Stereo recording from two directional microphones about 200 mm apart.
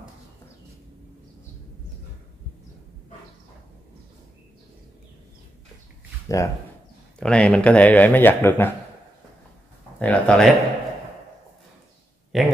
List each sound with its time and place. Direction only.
6.2 s speech: 15° left (ahead or behind)
7.2 s speech: 5° left (ahead or behind)
9.9 s speech: 5° left (ahead or behind)
12.3 s speech: centre (ahead or behind)